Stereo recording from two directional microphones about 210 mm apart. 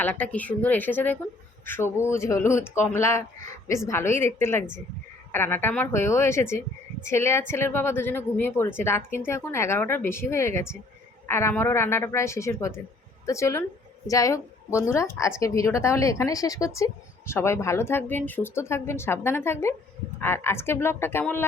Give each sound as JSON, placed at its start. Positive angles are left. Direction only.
{"t": 0.0, "sound": "a woman's voice", "side_deg": 5}